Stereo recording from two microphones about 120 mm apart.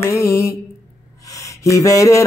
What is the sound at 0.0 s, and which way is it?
Mantra, 25° left (ahead or behind).